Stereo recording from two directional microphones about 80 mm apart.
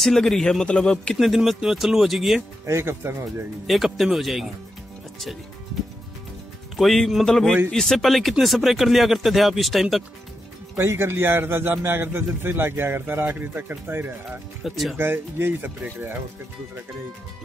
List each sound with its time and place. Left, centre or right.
0.0 s speech: centre
1.1 s speech: centre
2.6 s speech: right
3.6 s speech: centre
6.8 s speech: centre
10.8 s a man's voice: right
14.6 s speech: centre
15.0 s a man's voice: right